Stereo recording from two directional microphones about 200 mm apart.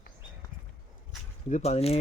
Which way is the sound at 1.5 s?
35° left (ahead or behind).